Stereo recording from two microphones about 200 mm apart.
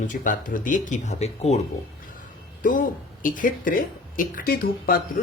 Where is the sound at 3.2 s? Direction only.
40° left (ahead or behind).